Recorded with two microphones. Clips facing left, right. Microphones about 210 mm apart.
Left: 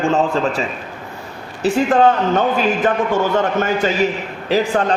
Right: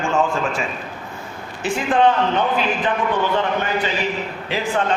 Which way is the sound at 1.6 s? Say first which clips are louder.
Left 4 dB; 45° left (ahead or behind).